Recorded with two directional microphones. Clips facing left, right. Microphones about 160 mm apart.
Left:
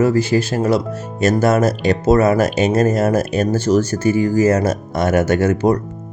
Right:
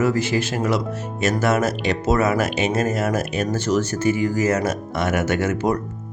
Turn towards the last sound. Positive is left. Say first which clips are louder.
# left 6 dB
turn(degrees=35)  # may be behind; listen again after turning